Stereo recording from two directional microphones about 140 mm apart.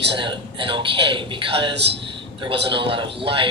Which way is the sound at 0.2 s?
35° right (ahead or behind).